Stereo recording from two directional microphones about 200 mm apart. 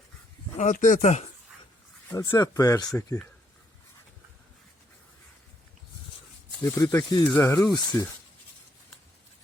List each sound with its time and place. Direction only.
0.5 s speech: 40° left (ahead or behind)
2.0 s speech: 15° left (ahead or behind)
6.6 s speech: 15° left (ahead or behind)